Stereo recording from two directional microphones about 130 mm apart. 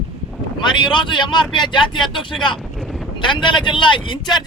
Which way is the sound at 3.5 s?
40° left (ahead or behind).